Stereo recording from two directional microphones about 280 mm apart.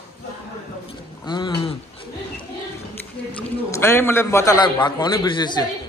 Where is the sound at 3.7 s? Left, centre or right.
Centre.